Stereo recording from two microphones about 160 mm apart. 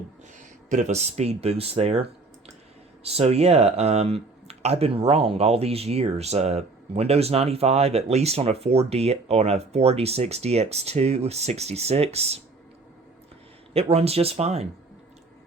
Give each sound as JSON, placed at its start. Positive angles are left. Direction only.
{"t": 0.7, "sound": "speech", "side_deg": -50}
{"t": 13.7, "sound": "speech", "side_deg": -40}